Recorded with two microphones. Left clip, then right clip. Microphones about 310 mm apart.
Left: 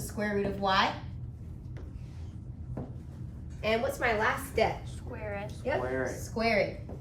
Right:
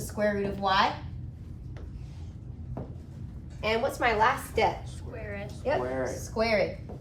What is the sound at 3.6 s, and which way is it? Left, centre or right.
Speech, centre.